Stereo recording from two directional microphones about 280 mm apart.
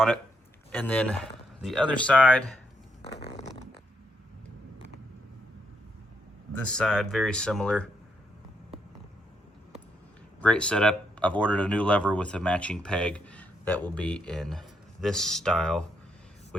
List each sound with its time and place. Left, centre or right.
0.7 s speech: centre
3.0 s a sound: left
6.7 s speech: centre
10.4 s speech: centre